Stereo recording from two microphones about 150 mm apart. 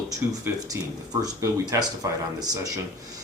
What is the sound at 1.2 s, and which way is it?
Speech, 25° right (ahead or behind).